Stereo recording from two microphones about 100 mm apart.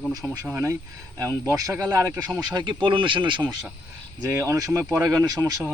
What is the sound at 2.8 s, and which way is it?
Speech, 55° right (ahead or behind).